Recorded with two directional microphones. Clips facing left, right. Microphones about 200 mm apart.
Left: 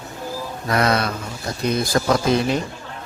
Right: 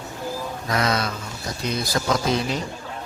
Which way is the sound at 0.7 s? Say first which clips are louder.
Left 4 dB; 60° left (ahead or behind).